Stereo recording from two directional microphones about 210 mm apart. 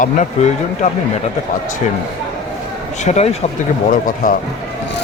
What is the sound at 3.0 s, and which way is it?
Speech, 30° left (ahead or behind).